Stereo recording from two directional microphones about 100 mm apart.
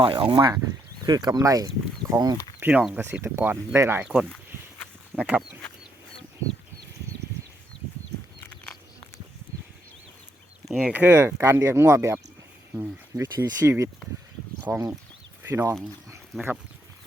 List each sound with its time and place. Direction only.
0.0 s speech: 60° right (ahead or behind); by 2.4 s 45° right (ahead or behind)
2.6 s speech: 15° right (ahead or behind)
4.0 s speech: 10° right (ahead or behind)
8.4 s a sound: 15° left (ahead or behind)
10.7 s speech: 10° right (ahead or behind); by 12.1 s 30° right (ahead or behind)
13.1 s speech: 30° right (ahead or behind)